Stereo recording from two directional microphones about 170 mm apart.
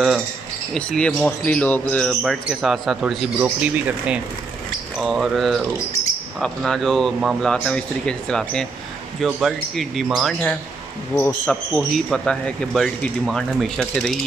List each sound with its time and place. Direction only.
0.7 s speech: 5° left (ahead or behind)